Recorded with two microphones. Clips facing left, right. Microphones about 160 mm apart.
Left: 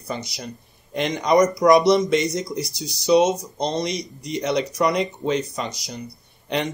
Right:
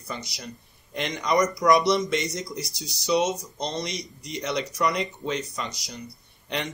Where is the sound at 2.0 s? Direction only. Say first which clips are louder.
Left 7 dB; 20° left (ahead or behind).